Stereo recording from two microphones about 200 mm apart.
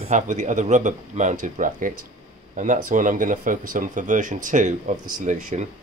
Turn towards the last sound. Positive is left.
turn(degrees=-40)  # may be behind; listen again after turning